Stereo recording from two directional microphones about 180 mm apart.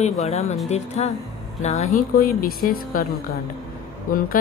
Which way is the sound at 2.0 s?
55° left (ahead or behind).